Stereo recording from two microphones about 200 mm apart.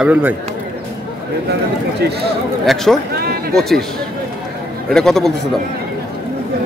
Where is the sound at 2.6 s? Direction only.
Centre (ahead or behind).